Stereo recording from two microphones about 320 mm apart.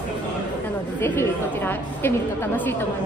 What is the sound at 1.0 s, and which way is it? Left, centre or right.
A woman's voice, centre.